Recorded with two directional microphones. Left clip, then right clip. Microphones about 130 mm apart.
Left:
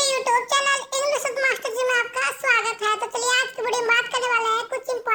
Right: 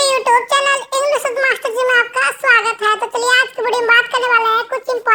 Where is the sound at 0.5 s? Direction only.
20° right (ahead or behind).